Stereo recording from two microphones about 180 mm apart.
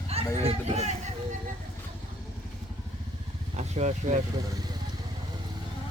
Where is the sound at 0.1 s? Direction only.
35° right (ahead or behind).